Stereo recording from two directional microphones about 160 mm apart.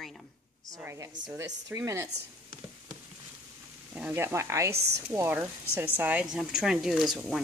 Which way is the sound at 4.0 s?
10° right (ahead or behind).